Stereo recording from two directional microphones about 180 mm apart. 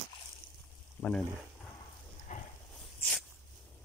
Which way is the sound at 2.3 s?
45° left (ahead or behind).